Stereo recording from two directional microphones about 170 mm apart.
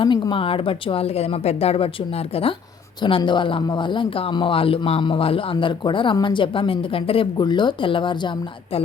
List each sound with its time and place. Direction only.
0.0 s speech: 30° left (ahead or behind)